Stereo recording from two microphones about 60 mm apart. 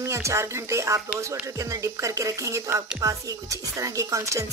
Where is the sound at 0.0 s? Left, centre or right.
Right.